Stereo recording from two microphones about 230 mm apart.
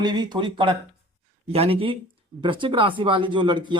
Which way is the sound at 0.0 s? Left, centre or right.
Centre.